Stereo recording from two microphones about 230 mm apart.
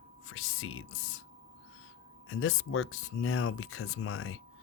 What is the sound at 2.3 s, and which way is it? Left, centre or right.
Speech, left.